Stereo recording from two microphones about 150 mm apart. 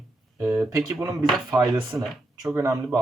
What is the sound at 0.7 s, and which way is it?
Speech, 25° right (ahead or behind).